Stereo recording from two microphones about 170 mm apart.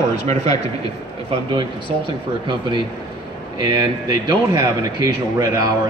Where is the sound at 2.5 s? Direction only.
25° right (ahead or behind).